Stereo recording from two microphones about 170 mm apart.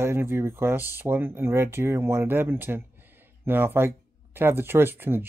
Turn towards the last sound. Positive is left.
turn(degrees=-10)  # may be behind; listen again after turning